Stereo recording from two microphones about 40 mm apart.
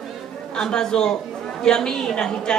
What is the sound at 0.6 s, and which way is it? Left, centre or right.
A woman's voice, centre.